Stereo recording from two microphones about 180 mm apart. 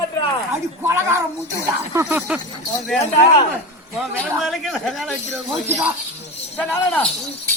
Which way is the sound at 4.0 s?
Centre (ahead or behind).